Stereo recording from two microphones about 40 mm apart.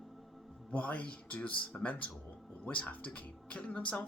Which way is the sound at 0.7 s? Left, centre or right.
Left.